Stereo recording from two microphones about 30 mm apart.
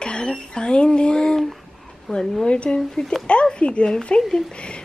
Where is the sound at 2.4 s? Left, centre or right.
Left.